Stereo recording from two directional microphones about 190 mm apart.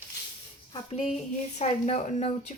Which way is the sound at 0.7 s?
30° left (ahead or behind).